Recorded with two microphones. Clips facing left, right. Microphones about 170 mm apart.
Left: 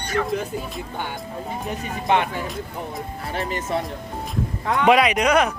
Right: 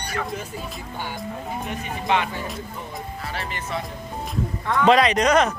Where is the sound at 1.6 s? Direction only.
50° left (ahead or behind).